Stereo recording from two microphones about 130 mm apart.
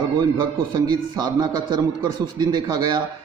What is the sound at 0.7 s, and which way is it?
A man's voice, 30° right (ahead or behind).